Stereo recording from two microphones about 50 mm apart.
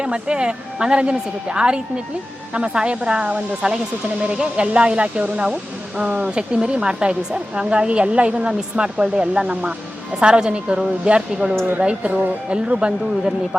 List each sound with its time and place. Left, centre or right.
0.0 s speech: centre
6.2 s speech: centre
12.6 s speech: centre